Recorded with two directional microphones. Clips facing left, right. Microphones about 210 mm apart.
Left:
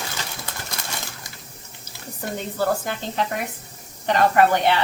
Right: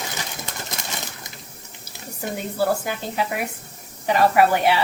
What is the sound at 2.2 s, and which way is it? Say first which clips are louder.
A woman's voice: right 1 dB; 10° right (ahead or behind).